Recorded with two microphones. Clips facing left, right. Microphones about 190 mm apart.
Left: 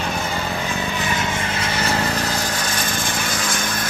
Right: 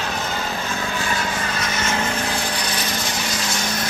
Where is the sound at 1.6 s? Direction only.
35° left (ahead or behind).